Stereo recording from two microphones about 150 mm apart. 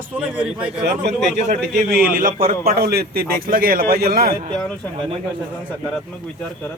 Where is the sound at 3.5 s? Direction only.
70° right (ahead or behind); by 4.3 s 90° right.